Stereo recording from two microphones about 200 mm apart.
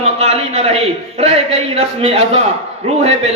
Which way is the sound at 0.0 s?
30° right (ahead or behind).